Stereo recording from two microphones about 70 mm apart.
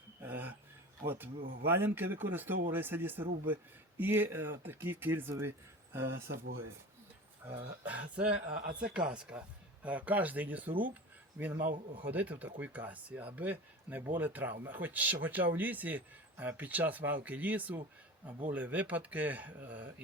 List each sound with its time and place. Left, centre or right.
0.2 s a sound: right
1.0 s speech: right
7.4 s speech: centre